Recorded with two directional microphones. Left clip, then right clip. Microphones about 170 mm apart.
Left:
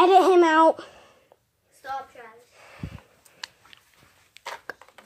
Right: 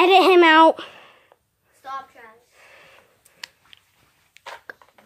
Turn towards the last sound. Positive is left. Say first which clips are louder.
# left 2 dB
turn(degrees=-10)  # may be behind; listen again after turning